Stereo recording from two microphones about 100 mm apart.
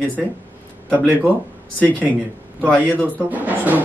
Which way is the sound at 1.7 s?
15° left (ahead or behind).